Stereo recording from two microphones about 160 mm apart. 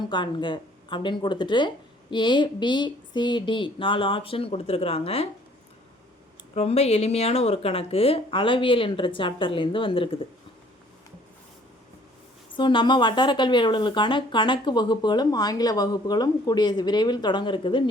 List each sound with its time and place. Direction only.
0.1 s speech: 30° left (ahead or behind)
6.5 s speech: 40° left (ahead or behind)
12.5 s speech: 30° left (ahead or behind)